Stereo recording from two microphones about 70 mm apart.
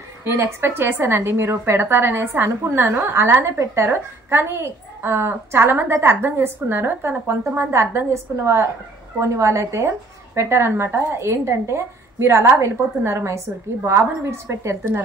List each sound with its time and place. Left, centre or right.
0.2 s a woman's voice: right